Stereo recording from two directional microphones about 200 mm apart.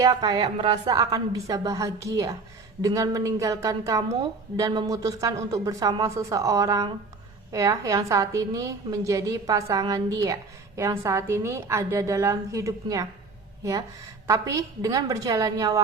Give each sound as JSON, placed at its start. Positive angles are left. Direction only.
{"t": 0.0, "sound": "a woman's voice", "side_deg": -20}
{"t": 14.3, "sound": "a woman's voice", "side_deg": -15}